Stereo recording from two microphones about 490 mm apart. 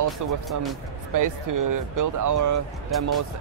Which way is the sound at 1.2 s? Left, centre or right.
Right.